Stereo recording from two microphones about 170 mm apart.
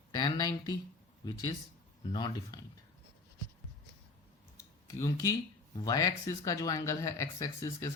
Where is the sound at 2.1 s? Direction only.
25° left (ahead or behind).